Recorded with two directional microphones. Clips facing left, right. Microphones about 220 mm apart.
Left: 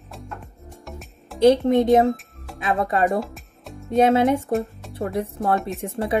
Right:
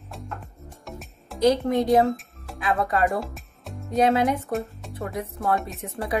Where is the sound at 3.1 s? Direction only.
Centre (ahead or behind).